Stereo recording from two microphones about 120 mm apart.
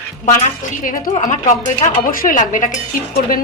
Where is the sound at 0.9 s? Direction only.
90° left.